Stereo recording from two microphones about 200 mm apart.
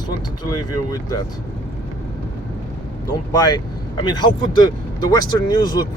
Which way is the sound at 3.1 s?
20° left (ahead or behind).